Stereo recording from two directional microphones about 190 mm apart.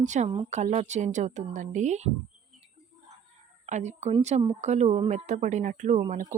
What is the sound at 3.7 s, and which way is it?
Speech, 40° right (ahead or behind).